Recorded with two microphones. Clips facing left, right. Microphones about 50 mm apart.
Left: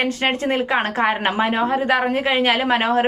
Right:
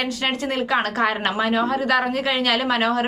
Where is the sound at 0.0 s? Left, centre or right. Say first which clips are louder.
Left 4 dB; left.